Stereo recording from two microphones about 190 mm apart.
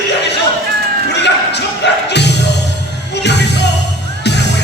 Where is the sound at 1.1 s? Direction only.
65° left (ahead or behind).